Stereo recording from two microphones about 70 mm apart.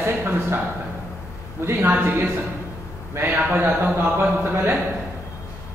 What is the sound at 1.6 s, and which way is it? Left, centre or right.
Speech, right.